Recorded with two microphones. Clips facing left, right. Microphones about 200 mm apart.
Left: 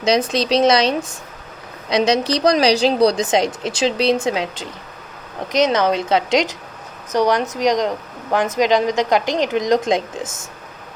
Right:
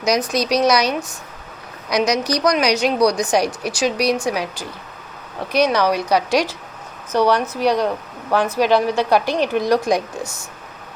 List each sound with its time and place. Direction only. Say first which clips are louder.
0.0 s a woman's voice: left 2 dB; 25° left (ahead or behind)